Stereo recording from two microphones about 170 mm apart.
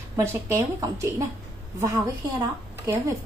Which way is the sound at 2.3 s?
20° right (ahead or behind).